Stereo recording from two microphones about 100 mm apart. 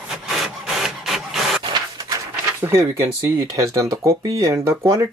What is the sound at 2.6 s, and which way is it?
Speech, 25° right (ahead or behind).